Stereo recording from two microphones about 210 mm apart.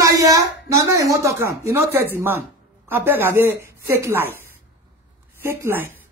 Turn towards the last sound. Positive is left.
turn(degrees=-10)  # may be behind; listen again after turning